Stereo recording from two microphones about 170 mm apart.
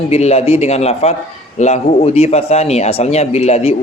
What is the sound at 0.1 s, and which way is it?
Speech, 40° left (ahead or behind).